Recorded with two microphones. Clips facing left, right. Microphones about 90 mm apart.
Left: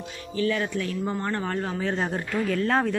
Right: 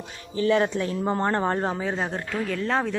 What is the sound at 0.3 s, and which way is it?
Speech, 30° right (ahead or behind).